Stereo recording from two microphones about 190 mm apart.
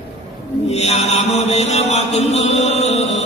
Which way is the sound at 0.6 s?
35° left (ahead or behind).